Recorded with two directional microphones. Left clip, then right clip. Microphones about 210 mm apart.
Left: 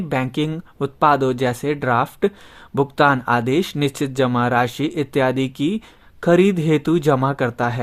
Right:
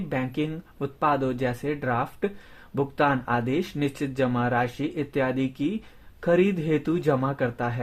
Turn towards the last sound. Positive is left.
turn(degrees=40)  # may be behind; listen again after turning